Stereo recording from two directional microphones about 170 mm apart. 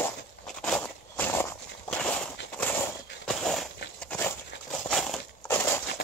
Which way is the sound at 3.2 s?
5° left (ahead or behind).